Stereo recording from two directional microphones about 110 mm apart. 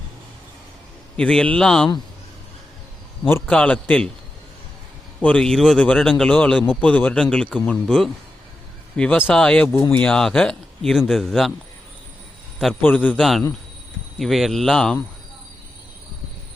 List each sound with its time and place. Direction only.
1.1 s speech: 10° left (ahead or behind)
3.2 s a man's voice: 20° left (ahead or behind)
5.2 s speech: 10° left (ahead or behind)
12.8 s speech: 15° left (ahead or behind)
14.2 s speech: centre (ahead or behind)